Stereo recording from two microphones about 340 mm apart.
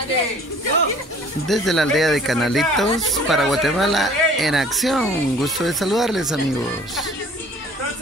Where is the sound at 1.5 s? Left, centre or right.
Centre.